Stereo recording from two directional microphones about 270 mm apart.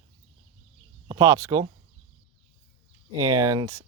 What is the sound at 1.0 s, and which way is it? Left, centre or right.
Speech, centre.